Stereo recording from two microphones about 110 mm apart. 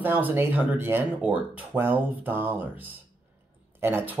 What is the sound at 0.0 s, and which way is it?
Speech, 20° right (ahead or behind).